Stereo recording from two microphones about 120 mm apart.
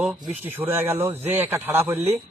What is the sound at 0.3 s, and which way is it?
A man's voice, 15° right (ahead or behind).